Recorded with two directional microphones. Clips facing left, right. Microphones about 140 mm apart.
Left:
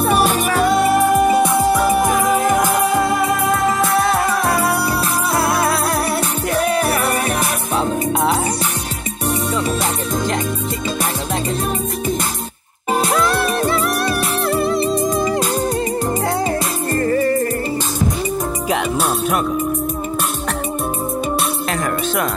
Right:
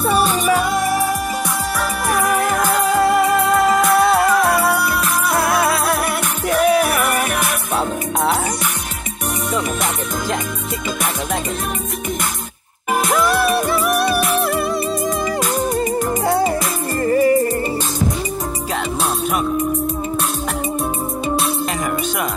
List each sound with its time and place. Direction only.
1.4 s music: 25° left (ahead or behind)
4.0 s music: centre (ahead or behind)
6.9 s music: 30° left (ahead or behind)
13.2 s music: 5° right (ahead or behind)
16.3 s music: 5° right (ahead or behind)